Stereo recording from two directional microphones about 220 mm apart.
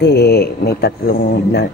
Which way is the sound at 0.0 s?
50° left (ahead or behind).